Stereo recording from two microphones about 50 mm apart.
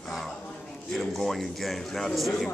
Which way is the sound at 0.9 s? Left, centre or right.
Centre.